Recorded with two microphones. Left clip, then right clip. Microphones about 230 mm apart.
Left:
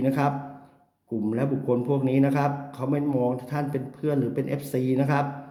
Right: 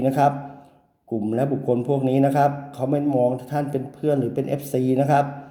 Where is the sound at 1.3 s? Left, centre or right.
Centre.